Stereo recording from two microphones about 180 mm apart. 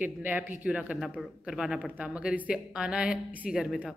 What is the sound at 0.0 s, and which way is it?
Speech, 10° right (ahead or behind).